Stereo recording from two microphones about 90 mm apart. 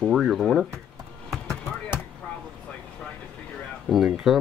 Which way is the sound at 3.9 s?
Centre (ahead or behind).